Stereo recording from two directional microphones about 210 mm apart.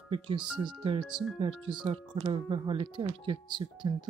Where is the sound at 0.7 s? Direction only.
25° right (ahead or behind).